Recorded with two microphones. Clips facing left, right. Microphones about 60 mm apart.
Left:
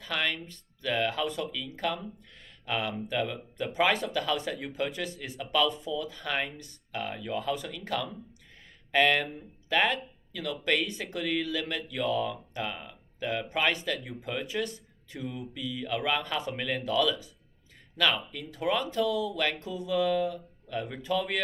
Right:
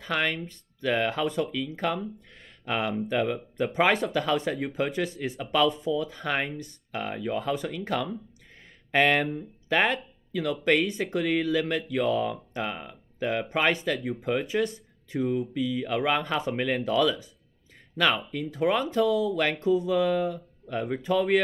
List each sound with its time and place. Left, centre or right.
0.0 s speech: right
18.3 s speech: right